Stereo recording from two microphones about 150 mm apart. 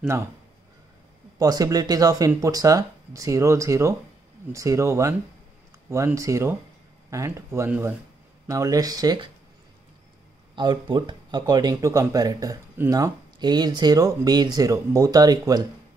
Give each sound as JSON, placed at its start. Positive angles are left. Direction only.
{"t": 1.4, "sound": "speech", "side_deg": -25}
{"t": 10.5, "sound": "speech", "side_deg": -30}